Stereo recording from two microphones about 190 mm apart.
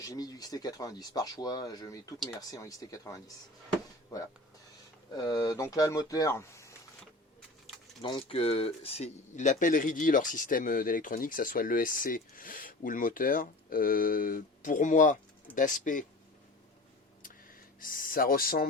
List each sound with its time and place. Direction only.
0.0 s speech: 20° left (ahead or behind)
5.1 s speech: 20° left (ahead or behind)
8.0 s speech: 30° left (ahead or behind)
17.7 s speech: 45° left (ahead or behind)